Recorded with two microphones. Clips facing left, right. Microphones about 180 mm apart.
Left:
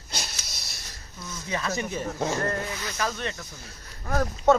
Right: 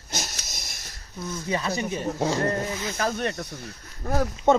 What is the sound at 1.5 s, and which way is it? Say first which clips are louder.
Speech: right 1 dB; 30° right (ahead or behind).